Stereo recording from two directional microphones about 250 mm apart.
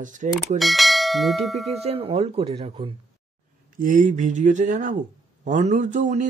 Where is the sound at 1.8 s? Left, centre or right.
Right.